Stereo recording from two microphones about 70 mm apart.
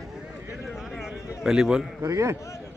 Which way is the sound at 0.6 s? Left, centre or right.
Centre.